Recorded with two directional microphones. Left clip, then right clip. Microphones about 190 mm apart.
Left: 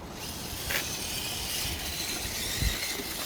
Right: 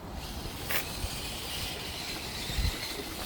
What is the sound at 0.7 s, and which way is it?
Vehicle, 10° right (ahead or behind).